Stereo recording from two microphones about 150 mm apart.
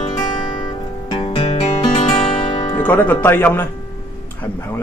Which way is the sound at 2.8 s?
10° left (ahead or behind).